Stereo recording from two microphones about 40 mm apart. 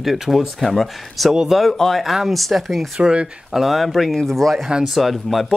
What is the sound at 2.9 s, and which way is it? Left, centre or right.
Speech, right.